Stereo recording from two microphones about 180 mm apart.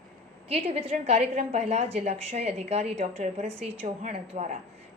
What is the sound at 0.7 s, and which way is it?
Speech, 35° right (ahead or behind).